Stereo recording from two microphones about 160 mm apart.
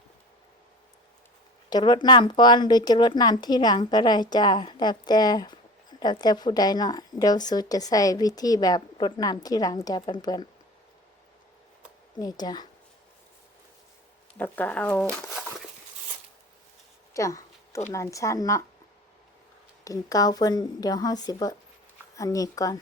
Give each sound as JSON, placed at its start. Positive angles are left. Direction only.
{"t": 1.7, "sound": "speech", "side_deg": 30}
{"t": 12.2, "sound": "speech", "side_deg": 25}
{"t": 14.3, "sound": "speech", "side_deg": 10}
{"t": 15.4, "sound": "a sound", "side_deg": -5}
{"t": 17.2, "sound": "a sound", "side_deg": 20}
{"t": 17.9, "sound": "speech", "side_deg": 20}
{"t": 19.8, "sound": "speech", "side_deg": 20}